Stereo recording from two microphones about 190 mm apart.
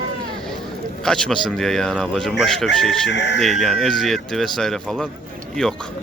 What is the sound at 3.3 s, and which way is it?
Speech, centre (ahead or behind).